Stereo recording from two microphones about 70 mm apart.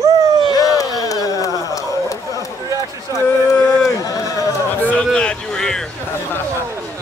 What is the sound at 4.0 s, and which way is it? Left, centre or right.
Speech, left.